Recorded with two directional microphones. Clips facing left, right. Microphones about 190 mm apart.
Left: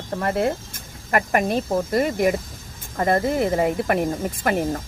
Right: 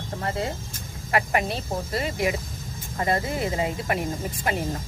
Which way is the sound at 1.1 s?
50° left (ahead or behind).